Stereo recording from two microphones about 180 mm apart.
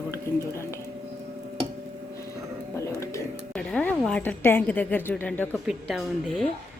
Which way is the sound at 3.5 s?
5° left (ahead or behind).